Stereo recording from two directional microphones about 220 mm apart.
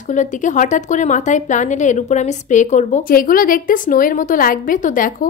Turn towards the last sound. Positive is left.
turn(degrees=40)  # may be behind; listen again after turning